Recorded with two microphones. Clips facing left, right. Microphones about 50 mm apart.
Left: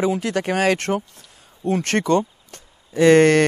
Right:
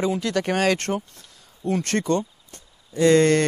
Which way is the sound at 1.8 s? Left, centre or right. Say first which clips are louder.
Left 6 dB; left.